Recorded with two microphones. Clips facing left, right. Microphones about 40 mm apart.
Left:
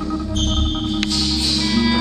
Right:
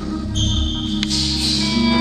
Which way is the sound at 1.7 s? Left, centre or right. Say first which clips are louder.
Right 1 dB; centre.